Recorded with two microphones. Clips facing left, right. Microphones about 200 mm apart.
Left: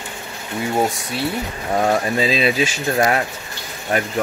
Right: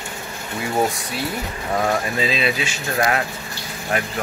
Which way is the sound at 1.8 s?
35° left (ahead or behind).